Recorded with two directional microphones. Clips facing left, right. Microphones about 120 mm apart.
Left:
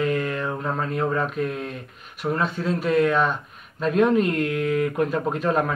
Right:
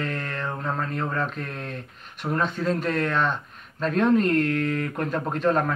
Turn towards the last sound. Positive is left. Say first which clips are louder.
# even
turn(degrees=5)  # may be behind; listen again after turning